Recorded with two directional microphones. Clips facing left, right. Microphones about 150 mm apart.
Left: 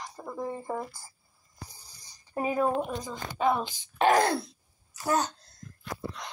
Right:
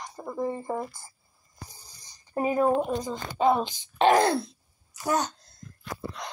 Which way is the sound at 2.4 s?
Centre (ahead or behind).